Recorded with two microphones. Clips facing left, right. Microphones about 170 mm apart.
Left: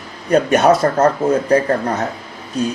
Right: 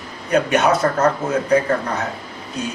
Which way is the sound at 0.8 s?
35° left (ahead or behind).